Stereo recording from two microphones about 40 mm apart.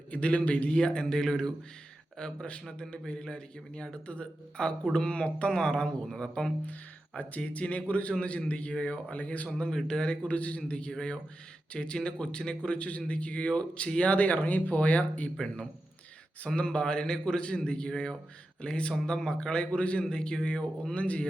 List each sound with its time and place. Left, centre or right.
0.1 s a man's voice: left; by 6.5 s centre
7.2 s speech: left
9.7 s speech: centre
10.2 s a man's voice: left
16.6 s a man's voice: left
19.7 s speech: left
20.1 s a man's voice: centre